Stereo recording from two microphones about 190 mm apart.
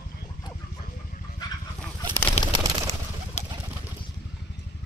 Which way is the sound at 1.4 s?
20° left (ahead or behind).